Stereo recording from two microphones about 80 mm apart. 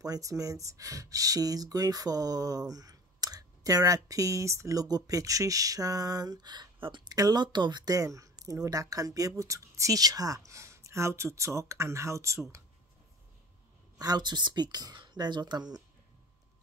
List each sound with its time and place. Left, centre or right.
0.0 s speech: right
7.2 s speech: right
7.4 s speech: right
13.9 s speech: right